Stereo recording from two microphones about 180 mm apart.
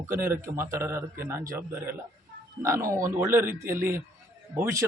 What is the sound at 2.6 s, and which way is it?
A man's voice, 15° right (ahead or behind).